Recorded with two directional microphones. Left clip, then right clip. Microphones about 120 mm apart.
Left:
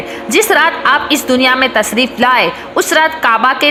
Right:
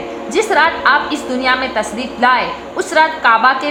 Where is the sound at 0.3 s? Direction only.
40° left (ahead or behind).